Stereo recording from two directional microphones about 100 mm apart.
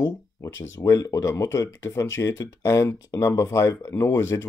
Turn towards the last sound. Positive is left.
turn(degrees=25)  # may be behind; listen again after turning